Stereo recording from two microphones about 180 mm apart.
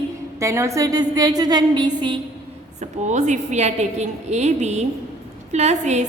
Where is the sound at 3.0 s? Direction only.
40° right (ahead or behind).